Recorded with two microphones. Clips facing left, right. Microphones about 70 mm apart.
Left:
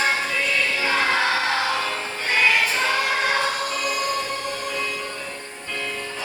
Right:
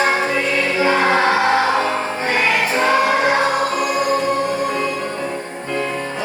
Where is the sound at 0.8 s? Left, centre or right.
Right.